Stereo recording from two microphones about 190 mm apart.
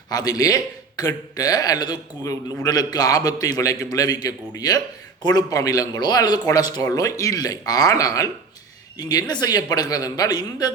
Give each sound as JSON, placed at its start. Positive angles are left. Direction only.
{"t": 0.1, "sound": "a man's voice", "side_deg": 20}